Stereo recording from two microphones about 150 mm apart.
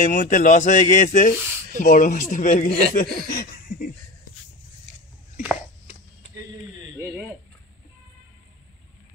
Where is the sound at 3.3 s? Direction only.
70° left (ahead or behind).